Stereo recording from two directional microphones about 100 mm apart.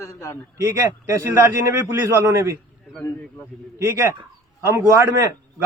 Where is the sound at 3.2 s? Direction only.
15° left (ahead or behind).